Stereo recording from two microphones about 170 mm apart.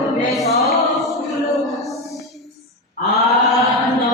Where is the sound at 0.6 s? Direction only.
Centre (ahead or behind).